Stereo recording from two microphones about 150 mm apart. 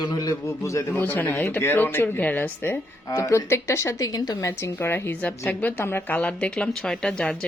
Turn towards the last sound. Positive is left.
turn(degrees=5)  # may be behind; listen again after turning